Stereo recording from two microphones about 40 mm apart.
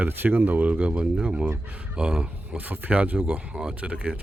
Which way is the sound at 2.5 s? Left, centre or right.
Right.